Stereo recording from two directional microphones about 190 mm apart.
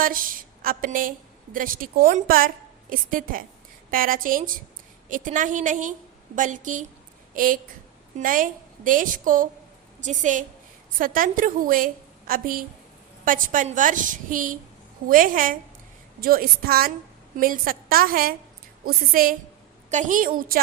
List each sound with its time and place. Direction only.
0.0 s a woman's voice: 45° right (ahead or behind)